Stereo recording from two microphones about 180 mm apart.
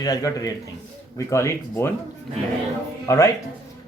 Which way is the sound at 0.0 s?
20° left (ahead or behind).